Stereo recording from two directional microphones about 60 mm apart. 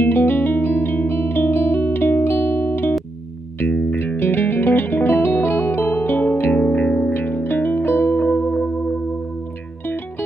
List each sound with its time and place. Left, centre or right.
0.0 s music: left
7.2 s music: left